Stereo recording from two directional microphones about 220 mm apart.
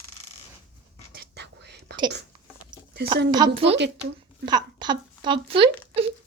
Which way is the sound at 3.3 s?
20° right (ahead or behind).